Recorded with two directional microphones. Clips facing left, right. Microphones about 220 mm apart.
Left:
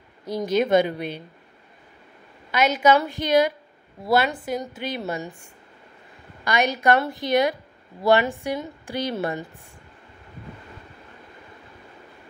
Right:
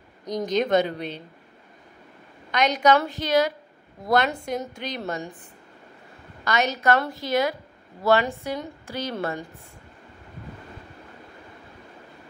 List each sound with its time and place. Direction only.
0.2 s a woman's voice: 5° left (ahead or behind)
2.5 s a woman's voice: 5° left (ahead or behind)
6.4 s a woman's voice: 15° left (ahead or behind)